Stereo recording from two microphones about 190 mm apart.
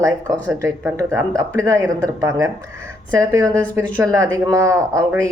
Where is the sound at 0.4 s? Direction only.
15° right (ahead or behind).